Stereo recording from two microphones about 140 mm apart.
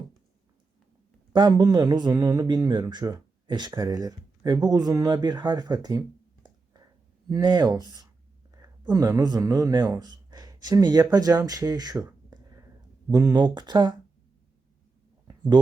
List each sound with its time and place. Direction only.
1.3 s speech: 30° right (ahead or behind)
13.1 s speech: 30° right (ahead or behind)